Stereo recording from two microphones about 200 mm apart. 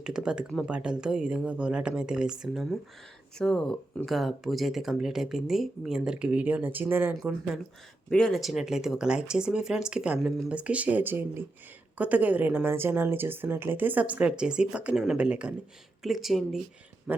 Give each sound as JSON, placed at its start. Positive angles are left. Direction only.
{"t": 0.0, "sound": "a woman's voice", "side_deg": -5}